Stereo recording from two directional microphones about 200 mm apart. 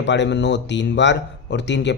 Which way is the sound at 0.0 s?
60° left (ahead or behind).